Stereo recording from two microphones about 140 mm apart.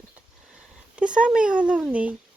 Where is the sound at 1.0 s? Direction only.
10° right (ahead or behind).